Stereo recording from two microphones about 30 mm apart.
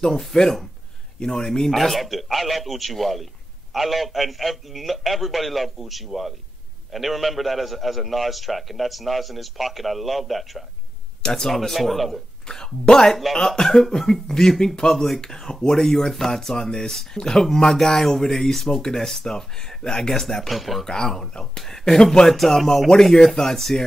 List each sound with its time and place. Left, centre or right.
0.0 s speech: centre
1.8 s a man's voice: centre
12.4 s speech: left
13.1 s speech: centre
20.4 s a man's voice: centre
20.8 s speech: centre
22.3 s a man's voice: centre